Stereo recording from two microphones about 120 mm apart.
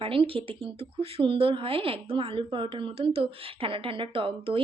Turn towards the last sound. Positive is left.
turn(degrees=-50)  # may be behind; listen again after turning